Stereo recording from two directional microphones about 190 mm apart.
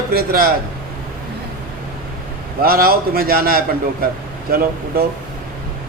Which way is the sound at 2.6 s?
50° right (ahead or behind).